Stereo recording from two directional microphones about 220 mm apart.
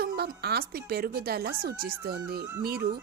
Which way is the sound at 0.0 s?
45° right (ahead or behind).